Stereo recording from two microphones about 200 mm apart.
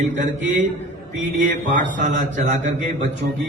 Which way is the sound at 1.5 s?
40° right (ahead or behind).